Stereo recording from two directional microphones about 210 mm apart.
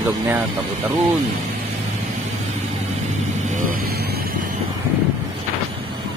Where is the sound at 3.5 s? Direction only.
50° right (ahead or behind).